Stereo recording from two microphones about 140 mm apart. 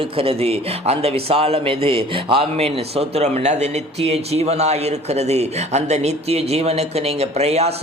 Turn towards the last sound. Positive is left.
turn(degrees=-50)  # may be behind; listen again after turning